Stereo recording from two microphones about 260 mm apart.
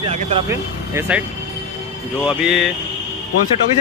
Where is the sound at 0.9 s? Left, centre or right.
Centre.